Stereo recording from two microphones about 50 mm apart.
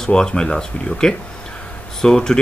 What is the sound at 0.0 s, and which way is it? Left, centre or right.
Speech, centre.